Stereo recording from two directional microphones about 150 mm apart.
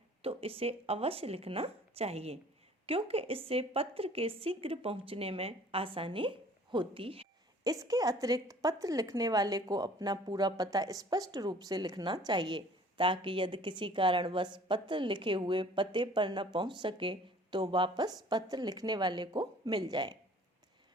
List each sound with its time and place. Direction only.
0.2 s a woman's voice: 40° right (ahead or behind)
7.6 s a woman's voice: 25° right (ahead or behind)